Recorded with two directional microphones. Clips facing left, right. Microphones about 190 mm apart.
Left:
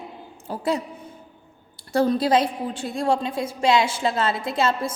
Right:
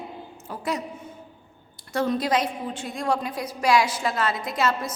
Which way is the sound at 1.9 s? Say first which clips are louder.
Left 4 dB; 35° left (ahead or behind).